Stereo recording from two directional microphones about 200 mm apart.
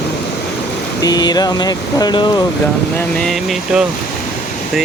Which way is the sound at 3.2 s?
Centre (ahead or behind).